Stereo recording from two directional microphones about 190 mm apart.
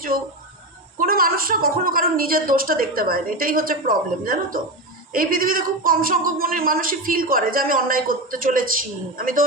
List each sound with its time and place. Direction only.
0.9 s a woman's voice: 50° right (ahead or behind)